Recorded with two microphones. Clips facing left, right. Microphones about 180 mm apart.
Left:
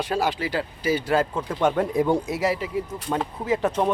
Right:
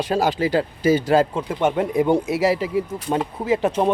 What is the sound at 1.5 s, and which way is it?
Speech, 15° right (ahead or behind).